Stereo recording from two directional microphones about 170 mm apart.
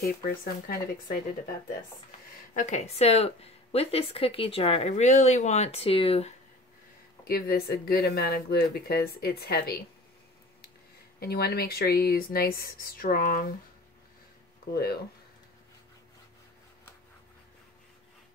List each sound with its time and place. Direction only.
0.0 s speech: 60° left (ahead or behind)
2.5 s speech: 45° left (ahead or behind)
7.2 s speech: 65° left (ahead or behind)
11.1 s speech: 65° left (ahead or behind)